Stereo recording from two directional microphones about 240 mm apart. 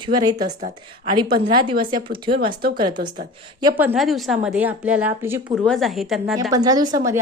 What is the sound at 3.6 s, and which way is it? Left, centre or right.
A woman's voice, centre.